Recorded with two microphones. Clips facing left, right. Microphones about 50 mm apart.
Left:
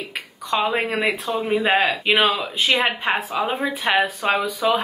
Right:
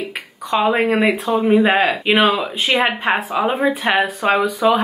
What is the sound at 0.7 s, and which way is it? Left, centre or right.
A woman's voice, centre.